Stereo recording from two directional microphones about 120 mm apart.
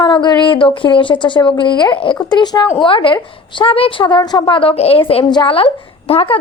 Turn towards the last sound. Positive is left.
turn(degrees=50)  # may be behind; listen again after turning